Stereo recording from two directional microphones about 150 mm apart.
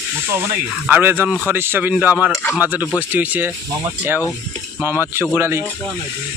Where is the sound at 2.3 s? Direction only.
15° left (ahead or behind).